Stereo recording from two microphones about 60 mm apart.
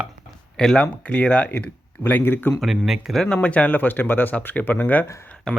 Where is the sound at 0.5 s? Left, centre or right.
Centre.